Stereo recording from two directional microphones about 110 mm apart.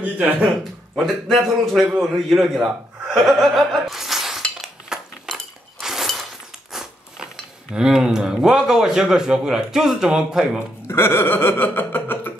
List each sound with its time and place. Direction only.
0.0 s speech: 15° right (ahead or behind)
0.9 s a man's voice: centre (ahead or behind)
5.8 s a sound: 5° right (ahead or behind)
6.7 s biting: 5° right (ahead or behind)
7.7 s a man's voice: 5° right (ahead or behind)
10.9 s chuckle: 20° left (ahead or behind)